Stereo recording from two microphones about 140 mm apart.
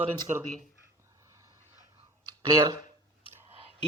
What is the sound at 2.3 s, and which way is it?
Speech, 25° right (ahead or behind).